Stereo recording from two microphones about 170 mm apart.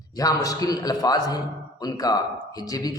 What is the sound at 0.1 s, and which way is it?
A man's voice, 20° left (ahead or behind).